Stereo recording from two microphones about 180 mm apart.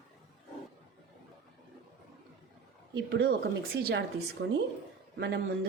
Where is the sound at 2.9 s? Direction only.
70° right (ahead or behind).